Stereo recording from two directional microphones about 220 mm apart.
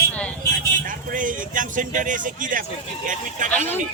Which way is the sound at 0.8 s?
35° right (ahead or behind).